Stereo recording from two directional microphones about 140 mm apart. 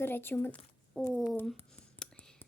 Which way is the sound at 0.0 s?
15° left (ahead or behind).